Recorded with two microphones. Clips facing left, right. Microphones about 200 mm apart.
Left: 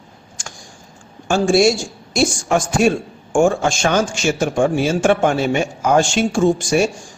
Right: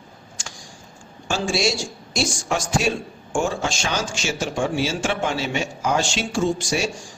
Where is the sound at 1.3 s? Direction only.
55° left (ahead or behind).